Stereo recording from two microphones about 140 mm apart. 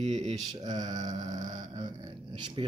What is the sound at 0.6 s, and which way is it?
Mantra, 30° right (ahead or behind).